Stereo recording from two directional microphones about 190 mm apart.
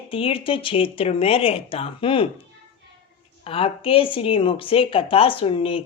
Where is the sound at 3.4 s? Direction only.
30° left (ahead or behind).